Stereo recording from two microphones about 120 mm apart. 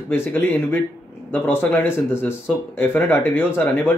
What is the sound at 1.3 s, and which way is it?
Speech, 15° left (ahead or behind).